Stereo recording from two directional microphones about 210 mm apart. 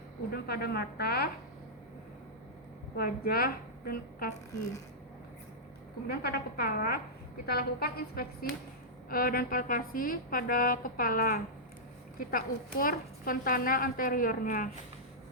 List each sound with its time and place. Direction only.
0.3 s a woman's voice: 45° left (ahead or behind)
2.9 s a woman's voice: 45° left (ahead or behind)
6.1 s a woman's voice: 50° left (ahead or behind)